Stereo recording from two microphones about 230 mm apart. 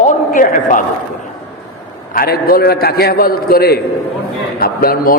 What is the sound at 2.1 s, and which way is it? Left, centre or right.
A man's voice, left.